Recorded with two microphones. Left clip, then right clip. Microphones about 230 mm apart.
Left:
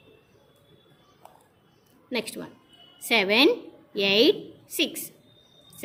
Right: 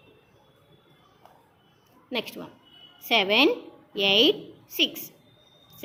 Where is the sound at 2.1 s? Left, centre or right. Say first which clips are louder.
Left 1 dB; left.